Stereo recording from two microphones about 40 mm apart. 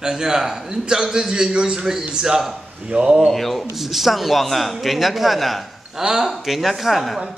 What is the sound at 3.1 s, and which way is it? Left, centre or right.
Speech, centre.